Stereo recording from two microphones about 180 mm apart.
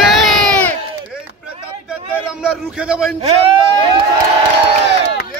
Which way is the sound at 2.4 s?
5° right (ahead or behind).